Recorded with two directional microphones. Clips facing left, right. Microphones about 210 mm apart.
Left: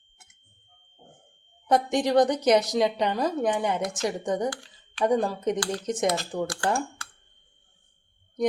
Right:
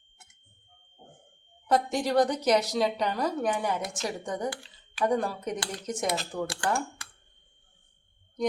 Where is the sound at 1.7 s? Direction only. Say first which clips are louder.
Left 3 dB; 20° left (ahead or behind).